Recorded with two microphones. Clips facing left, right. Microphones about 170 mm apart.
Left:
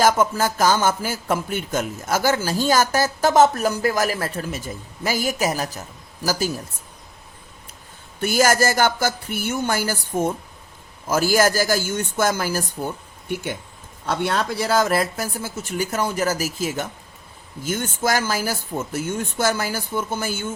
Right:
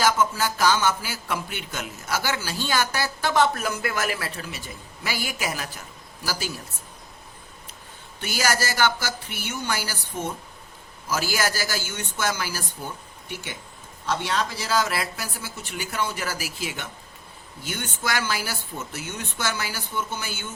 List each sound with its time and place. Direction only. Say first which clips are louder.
0.0 s speech: left 4 dB; 50° left (ahead or behind)
8.2 s speech: left 8 dB; 50° left (ahead or behind)